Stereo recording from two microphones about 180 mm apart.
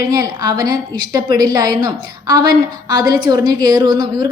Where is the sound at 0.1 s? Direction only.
20° right (ahead or behind).